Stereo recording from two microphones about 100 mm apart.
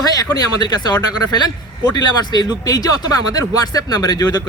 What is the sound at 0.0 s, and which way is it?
A man's voice, 40° left (ahead or behind).